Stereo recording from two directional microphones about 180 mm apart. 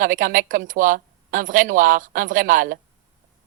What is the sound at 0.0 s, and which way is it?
Speech, 50° right (ahead or behind).